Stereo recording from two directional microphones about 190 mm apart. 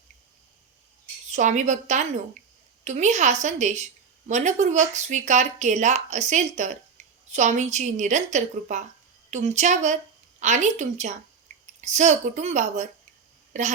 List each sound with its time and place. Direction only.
1.3 s speech: 40° right (ahead or behind)